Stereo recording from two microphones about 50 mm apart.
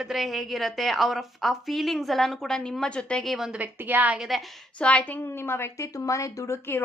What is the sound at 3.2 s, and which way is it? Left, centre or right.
Speech, centre.